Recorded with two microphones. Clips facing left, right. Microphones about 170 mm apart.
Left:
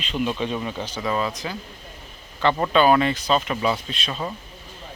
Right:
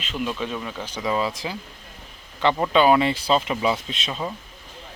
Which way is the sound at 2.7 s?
20° right (ahead or behind).